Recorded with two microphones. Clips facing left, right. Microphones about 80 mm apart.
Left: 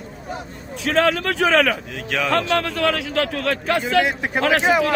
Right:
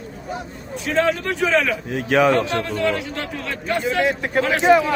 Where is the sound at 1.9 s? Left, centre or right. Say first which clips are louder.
Right 8 dB; right.